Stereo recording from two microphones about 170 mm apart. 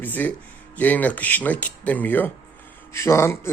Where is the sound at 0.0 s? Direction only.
10° left (ahead or behind).